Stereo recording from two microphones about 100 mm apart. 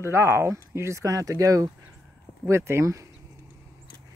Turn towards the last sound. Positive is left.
turn(degrees=-30)  # may be behind; listen again after turning